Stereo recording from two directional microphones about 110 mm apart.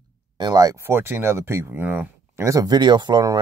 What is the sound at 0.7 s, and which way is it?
Speech, 20° right (ahead or behind).